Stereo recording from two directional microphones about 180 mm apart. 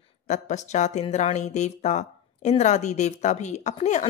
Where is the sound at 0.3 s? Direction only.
40° left (ahead or behind).